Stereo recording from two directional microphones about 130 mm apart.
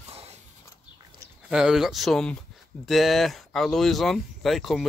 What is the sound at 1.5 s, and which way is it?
Speech, 5° right (ahead or behind).